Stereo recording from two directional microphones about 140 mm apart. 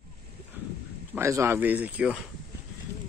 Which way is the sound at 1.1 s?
20° right (ahead or behind).